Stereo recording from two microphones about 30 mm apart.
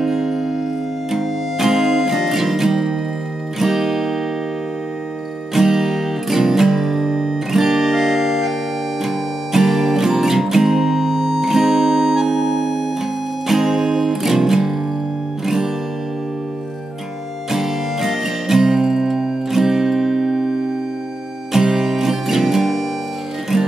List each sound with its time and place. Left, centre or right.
0.0 s music: centre
5.5 s music: centre
11.1 s music: centre
15.4 s guitar: centre
17.5 s music: centre